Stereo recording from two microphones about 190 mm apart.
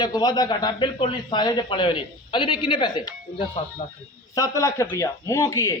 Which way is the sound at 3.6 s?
35° left (ahead or behind).